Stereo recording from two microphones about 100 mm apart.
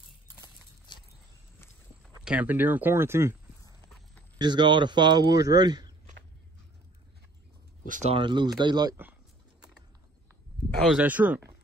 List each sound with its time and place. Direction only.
0.9 s a sound: 50° left (ahead or behind)
2.2 s speech: 15° right (ahead or behind)
4.4 s speech: 45° right (ahead or behind)
8.1 s speech: 55° right (ahead or behind)
11.0 s speech: 15° right (ahead or behind)